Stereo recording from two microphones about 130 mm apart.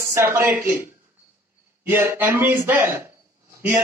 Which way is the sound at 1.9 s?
15° right (ahead or behind).